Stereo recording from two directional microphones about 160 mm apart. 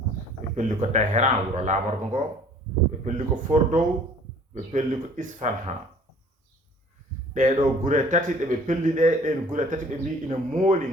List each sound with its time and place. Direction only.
0.5 s speech: 50° right (ahead or behind)
7.3 s speech: 50° right (ahead or behind)